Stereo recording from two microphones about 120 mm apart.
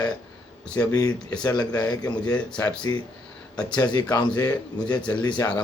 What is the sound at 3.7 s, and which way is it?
Speech, 35° left (ahead or behind).